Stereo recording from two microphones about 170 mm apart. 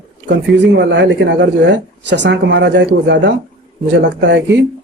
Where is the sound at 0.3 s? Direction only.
90° right.